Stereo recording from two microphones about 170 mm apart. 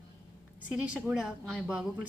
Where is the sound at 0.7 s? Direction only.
10° right (ahead or behind).